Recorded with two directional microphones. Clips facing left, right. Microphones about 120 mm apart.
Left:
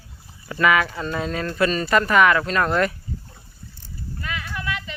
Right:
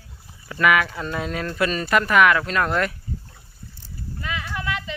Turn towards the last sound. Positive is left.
turn(degrees=-20)  # may be behind; listen again after turning